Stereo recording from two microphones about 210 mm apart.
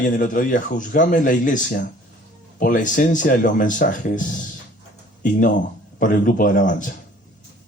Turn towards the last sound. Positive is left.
turn(degrees=40)  # may be behind; listen again after turning